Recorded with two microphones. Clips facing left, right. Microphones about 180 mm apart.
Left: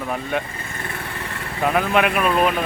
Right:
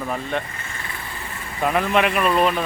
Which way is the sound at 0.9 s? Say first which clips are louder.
Left 4 dB; 65° left (ahead or behind).